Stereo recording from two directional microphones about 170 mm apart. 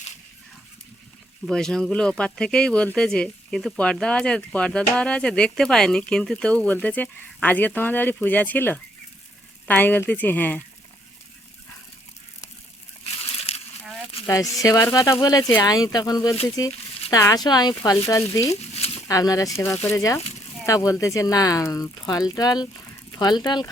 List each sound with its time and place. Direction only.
1.5 s speech: 5° left (ahead or behind)
13.3 s a sound: 35° left (ahead or behind)
14.3 s speech: 20° left (ahead or behind)